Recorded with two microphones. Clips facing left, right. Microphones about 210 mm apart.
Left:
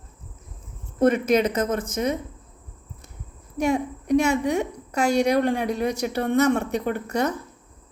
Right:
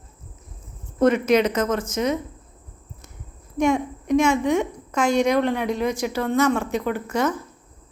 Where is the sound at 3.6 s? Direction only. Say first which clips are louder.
Right 2 dB; 35° left (ahead or behind).